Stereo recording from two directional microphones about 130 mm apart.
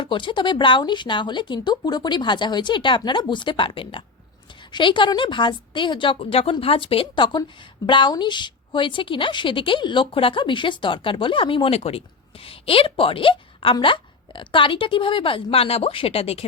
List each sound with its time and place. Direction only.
0.0 s a woman's voice: 40° left (ahead or behind)